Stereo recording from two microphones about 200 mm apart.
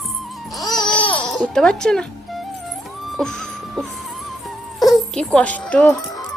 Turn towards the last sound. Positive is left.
turn(degrees=5)  # may be behind; listen again after turning